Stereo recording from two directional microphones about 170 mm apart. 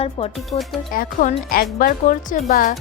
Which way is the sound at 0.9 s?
50° left (ahead or behind).